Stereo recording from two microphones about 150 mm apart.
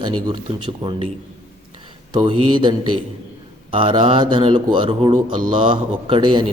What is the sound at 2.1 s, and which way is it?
Speech, 30° right (ahead or behind).